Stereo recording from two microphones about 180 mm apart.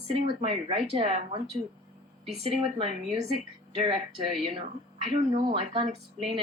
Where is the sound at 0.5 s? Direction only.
30° right (ahead or behind).